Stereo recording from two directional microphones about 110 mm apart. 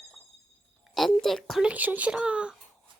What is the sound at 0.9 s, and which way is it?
Speech, centre (ahead or behind).